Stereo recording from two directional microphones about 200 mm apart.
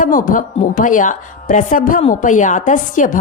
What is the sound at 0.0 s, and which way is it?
A woman's voice, 45° left (ahead or behind).